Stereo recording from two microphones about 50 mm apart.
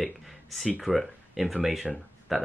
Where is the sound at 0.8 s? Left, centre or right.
Centre.